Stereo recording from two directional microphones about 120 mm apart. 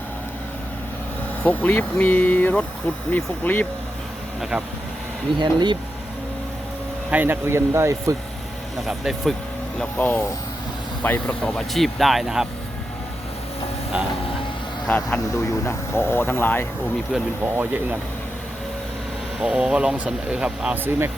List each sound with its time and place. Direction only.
1.5 s speech: 15° left (ahead or behind)
5.4 s speech: 40° right (ahead or behind)
7.1 s speech: 15° right (ahead or behind)
8.8 s speech: centre (ahead or behind)
9.7 s speech: 15° left (ahead or behind)
11.4 s speech: centre (ahead or behind)
13.9 s speech: 10° right (ahead or behind)
14.8 s speech: 10° left (ahead or behind)
15.3 s speech: 20° left (ahead or behind)
17.1 s speech: 5° right (ahead or behind)
19.4 s speech: 5° right (ahead or behind)